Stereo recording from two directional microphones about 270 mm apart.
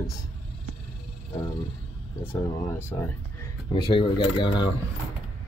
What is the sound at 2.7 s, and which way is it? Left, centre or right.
Speech, centre.